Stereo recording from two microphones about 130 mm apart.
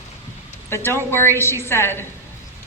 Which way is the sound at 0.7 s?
20° left (ahead or behind).